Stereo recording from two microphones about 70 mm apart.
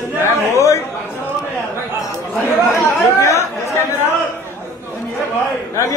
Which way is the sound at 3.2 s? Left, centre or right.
Left.